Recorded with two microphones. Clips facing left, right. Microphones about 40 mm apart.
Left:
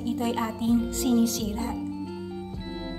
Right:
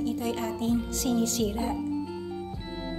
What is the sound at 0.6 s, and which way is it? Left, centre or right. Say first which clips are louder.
Speech: left 4 dB; centre.